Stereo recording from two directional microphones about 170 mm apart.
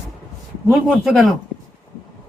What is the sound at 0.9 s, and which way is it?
Speech, centre (ahead or behind).